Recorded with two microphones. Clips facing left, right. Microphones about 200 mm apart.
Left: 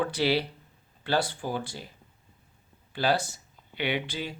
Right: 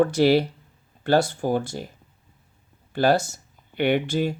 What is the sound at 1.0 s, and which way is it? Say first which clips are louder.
Speech: right 8 dB; 45° right (ahead or behind).